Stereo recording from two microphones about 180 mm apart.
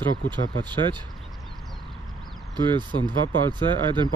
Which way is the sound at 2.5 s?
25° right (ahead or behind).